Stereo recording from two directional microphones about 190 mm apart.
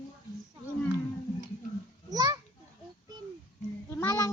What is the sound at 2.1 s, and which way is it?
Children playing, 20° right (ahead or behind).